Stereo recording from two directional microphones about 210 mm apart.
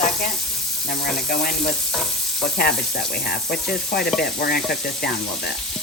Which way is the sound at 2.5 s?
45° left (ahead or behind).